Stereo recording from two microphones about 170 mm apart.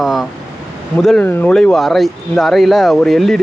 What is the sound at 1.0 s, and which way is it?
Speech, 5° left (ahead or behind).